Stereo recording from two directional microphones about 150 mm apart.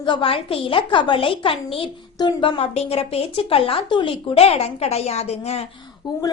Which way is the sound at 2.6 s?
40° left (ahead or behind).